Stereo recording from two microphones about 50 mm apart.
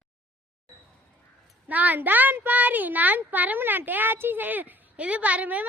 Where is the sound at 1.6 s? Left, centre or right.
Right.